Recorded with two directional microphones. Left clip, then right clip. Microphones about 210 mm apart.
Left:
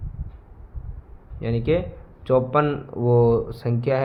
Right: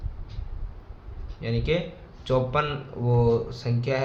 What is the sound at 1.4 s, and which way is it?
Speech, 45° left (ahead or behind).